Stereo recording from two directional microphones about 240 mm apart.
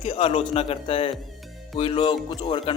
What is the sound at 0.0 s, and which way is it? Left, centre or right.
Speech, left.